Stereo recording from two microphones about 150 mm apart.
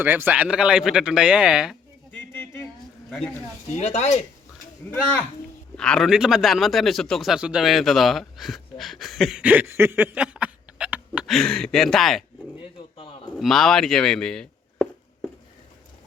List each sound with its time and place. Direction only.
0.0 s a man's voice: 15° right (ahead or behind)
2.1 s bird: 15° left (ahead or behind)
3.1 s speech: 5° left (ahead or behind)
3.8 s speech: 45° left (ahead or behind)
4.8 s a man's voice: 15° left (ahead or behind)
13.3 s speech: centre (ahead or behind)